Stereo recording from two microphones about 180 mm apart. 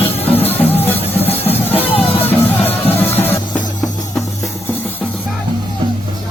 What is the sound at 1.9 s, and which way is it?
Music, 35° left (ahead or behind).